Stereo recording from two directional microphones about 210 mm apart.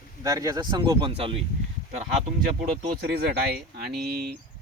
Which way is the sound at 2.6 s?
50° right (ahead or behind).